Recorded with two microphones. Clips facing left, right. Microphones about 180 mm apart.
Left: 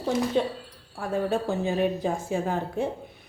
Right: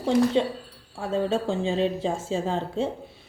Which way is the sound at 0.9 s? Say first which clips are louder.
Right 1 dB; 25° right (ahead or behind).